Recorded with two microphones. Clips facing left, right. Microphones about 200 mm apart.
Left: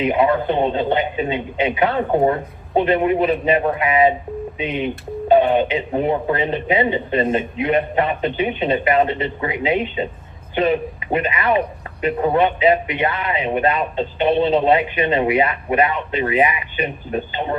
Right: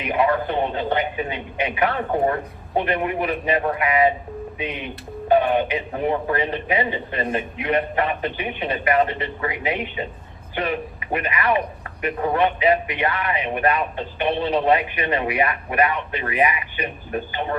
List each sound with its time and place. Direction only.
0.0 s a man's voice: 25° left (ahead or behind)